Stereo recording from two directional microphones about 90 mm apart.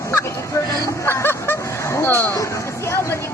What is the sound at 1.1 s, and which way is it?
Snicker, 25° left (ahead or behind).